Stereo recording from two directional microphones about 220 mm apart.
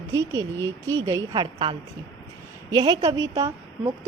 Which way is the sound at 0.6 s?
10° left (ahead or behind).